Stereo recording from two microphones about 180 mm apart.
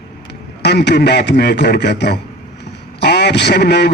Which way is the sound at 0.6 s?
70° left (ahead or behind).